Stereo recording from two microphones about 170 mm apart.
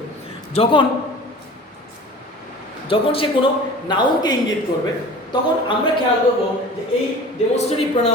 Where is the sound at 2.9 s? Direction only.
30° left (ahead or behind).